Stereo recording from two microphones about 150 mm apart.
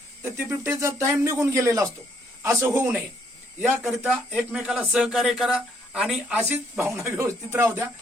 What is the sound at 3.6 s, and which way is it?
A man's voice, centre (ahead or behind).